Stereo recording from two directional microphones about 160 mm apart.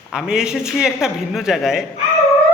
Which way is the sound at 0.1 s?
5° right (ahead or behind).